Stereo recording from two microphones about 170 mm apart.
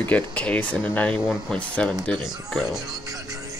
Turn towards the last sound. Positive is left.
turn(degrees=-20)  # may be behind; listen again after turning